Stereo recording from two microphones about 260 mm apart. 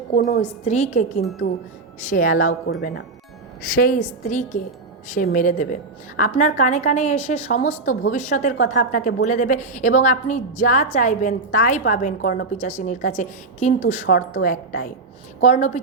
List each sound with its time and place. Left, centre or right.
0.1 s a woman's voice: left
0.6 s a woman's voice: left
3.8 s a woman's voice: left
14.2 s a woman's voice: left